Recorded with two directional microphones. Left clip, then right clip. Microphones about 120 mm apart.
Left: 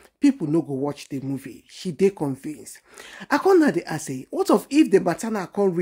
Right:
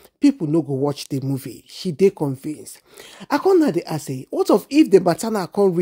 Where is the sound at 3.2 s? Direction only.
25° right (ahead or behind).